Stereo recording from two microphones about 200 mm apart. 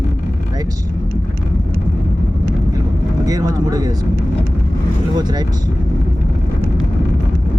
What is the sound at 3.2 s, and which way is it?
Speech, 20° right (ahead or behind).